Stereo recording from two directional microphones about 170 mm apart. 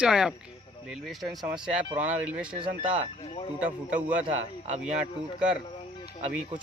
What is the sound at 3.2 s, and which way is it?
Speech, 35° left (ahead or behind).